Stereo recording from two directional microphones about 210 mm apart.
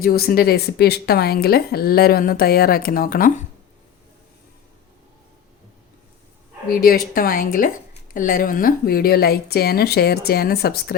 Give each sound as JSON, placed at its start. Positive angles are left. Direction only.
{"t": 0.0, "sound": "a woman's voice", "side_deg": 45}
{"t": 6.7, "sound": "a woman's voice", "side_deg": 45}